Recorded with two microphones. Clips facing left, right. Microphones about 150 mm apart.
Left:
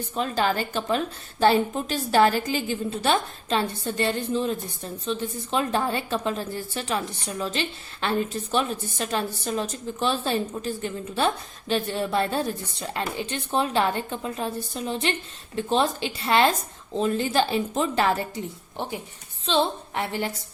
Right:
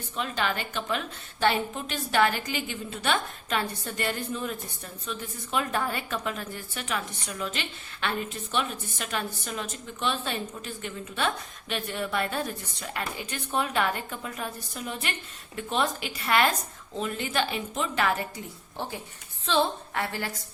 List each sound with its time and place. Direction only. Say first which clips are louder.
0.2 s a woman's voice: left 5 dB; 35° left (ahead or behind); by 20.3 s 20° left (ahead or behind)